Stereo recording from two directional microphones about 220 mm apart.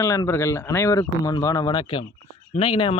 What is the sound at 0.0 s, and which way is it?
Speech, 15° left (ahead or behind).